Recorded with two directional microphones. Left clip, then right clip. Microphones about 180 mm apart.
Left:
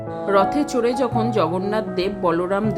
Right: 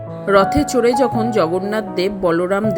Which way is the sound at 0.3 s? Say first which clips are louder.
Right 4 dB; 20° right (ahead or behind).